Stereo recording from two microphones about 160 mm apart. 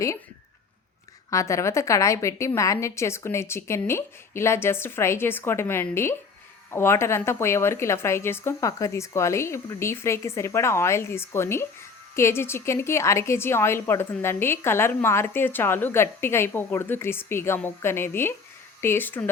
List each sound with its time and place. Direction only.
1.3 s a woman's voice: 20° left (ahead or behind)